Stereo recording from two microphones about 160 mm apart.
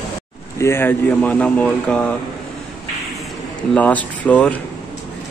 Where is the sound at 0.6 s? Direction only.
15° left (ahead or behind).